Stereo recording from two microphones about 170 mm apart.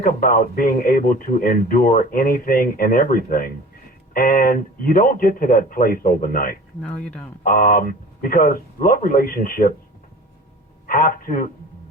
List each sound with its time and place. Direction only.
0.0 s speech: 55° left (ahead or behind)
6.8 s speech: 5° left (ahead or behind)
7.4 s speech: 55° left (ahead or behind)
10.8 s speech: 55° left (ahead or behind)